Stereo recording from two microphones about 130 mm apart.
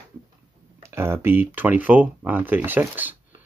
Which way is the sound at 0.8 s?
20° right (ahead or behind).